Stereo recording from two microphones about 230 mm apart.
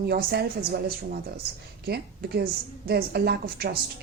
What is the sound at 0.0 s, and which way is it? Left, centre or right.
Speech, right.